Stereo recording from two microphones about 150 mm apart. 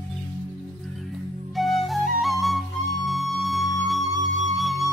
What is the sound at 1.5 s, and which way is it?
Music, centre (ahead or behind).